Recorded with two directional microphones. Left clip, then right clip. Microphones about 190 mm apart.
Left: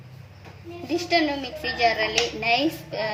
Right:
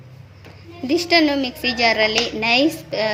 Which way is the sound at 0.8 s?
50° right (ahead or behind).